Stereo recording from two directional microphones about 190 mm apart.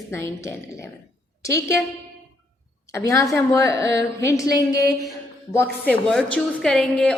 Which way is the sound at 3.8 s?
65° right (ahead or behind).